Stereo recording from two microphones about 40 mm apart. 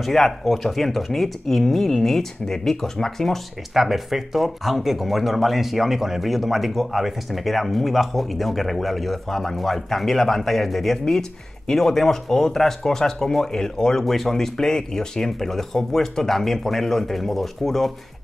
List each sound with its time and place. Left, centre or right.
0.0 s speech: centre
3.7 s speech: centre